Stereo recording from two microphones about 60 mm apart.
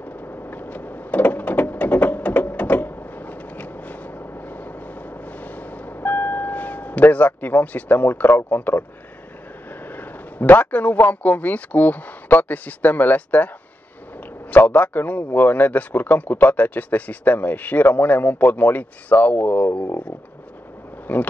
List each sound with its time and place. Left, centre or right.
0.5 s a sound: left
4.4 s vehicle: left
8.5 s a man's voice: left
9.8 s a man's voice: left
14.5 s a man's voice: left